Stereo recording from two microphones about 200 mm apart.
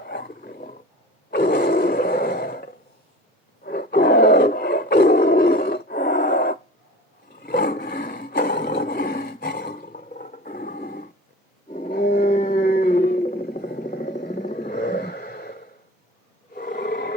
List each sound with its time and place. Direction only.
0.0 s roaring cats: 50° left (ahead or behind)
1.3 s grunt: 50° left (ahead or behind)
3.6 s roar: 50° left (ahead or behind)
11.7 s a sound: 45° left (ahead or behind)